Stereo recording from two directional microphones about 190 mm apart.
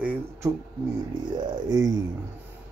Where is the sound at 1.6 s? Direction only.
20° right (ahead or behind).